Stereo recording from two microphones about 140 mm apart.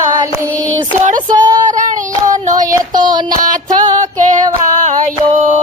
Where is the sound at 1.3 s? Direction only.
30° right (ahead or behind).